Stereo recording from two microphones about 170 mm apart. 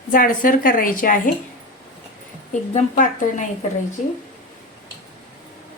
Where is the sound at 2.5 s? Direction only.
45° left (ahead or behind).